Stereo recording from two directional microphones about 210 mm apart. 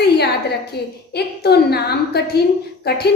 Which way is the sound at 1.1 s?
50° left (ahead or behind).